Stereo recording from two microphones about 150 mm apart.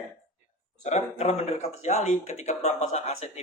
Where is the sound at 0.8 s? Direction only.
45° left (ahead or behind).